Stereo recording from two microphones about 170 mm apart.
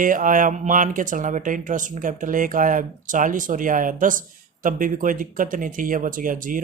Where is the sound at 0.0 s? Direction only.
50° right (ahead or behind).